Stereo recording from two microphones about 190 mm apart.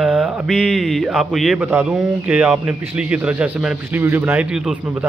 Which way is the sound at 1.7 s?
15° right (ahead or behind).